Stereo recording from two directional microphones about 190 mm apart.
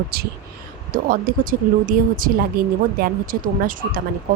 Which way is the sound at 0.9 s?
50° right (ahead or behind).